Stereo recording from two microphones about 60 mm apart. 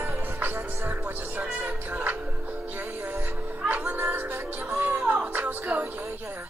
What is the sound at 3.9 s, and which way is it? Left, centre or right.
Music, right.